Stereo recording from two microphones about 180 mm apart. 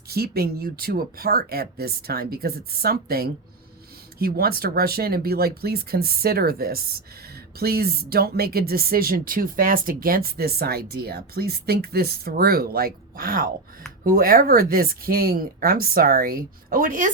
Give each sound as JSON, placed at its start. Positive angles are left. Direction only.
{"t": 0.1, "sound": "speech", "side_deg": -60}